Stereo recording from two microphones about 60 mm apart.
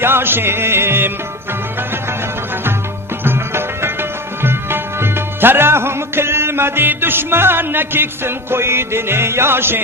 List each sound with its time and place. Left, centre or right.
0.0 s music: right
3.2 s music: right